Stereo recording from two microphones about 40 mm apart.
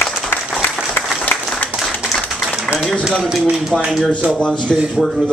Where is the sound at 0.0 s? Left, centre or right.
Left.